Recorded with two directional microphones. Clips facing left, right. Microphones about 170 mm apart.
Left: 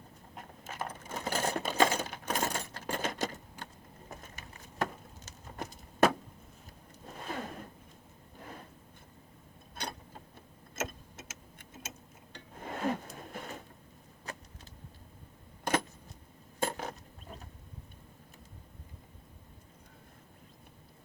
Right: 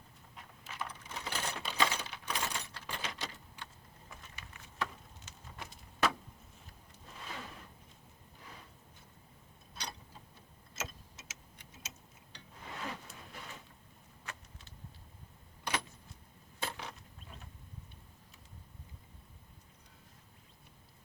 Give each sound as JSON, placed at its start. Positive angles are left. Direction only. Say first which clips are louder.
{"t": 0.3, "sound": "coin", "louder": "left 4 dB", "side_deg": 45}
{"t": 4.1, "sound": "a sound", "louder": "left 5 dB", "side_deg": 45}
{"t": 9.7, "sound": "mechanisms", "louder": "left 5 dB", "side_deg": 50}
{"t": 10.8, "sound": "clock", "louder": "left 7 dB", "side_deg": 50}
{"t": 14.3, "sound": "vehicle", "louder": "left 5 dB", "side_deg": 35}
{"t": 15.6, "sound": "vehicle", "louder": "left 7 dB", "side_deg": 50}
{"t": 16.6, "sound": "a sound", "louder": "left 8 dB", "side_deg": 45}